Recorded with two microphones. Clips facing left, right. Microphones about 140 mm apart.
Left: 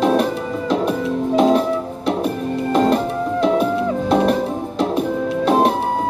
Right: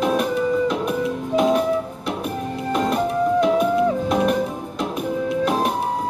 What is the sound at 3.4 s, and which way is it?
Music, 30° left (ahead or behind).